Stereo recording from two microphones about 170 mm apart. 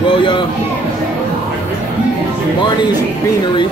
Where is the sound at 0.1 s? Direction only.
30° left (ahead or behind).